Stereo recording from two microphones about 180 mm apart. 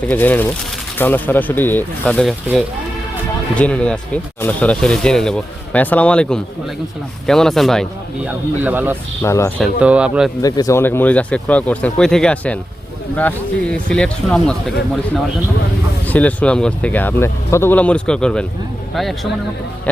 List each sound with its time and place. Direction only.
0.1 s speech: 10° left (ahead or behind)
3.5 s speech: 5° left (ahead or behind); by 9.0 s 10° right (ahead or behind)
9.2 s speech: 15° left (ahead or behind)
9.8 s speech: 5° right (ahead or behind)
10.4 s speech: 20° left (ahead or behind)
16.0 s speech: 10° left (ahead or behind)